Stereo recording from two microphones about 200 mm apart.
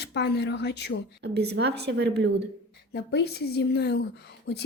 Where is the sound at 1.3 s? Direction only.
55° right (ahead or behind).